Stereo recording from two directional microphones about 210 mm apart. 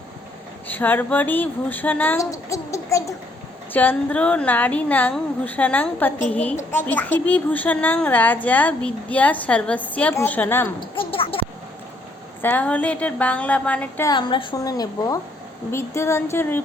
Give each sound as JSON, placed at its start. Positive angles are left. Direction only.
{"t": 0.7, "sound": "a woman's voice", "side_deg": 10}
{"t": 10.8, "sound": "speech", "side_deg": 25}
{"t": 12.4, "sound": "a woman's voice", "side_deg": 10}
{"t": 14.1, "sound": "a woman's voice", "side_deg": 20}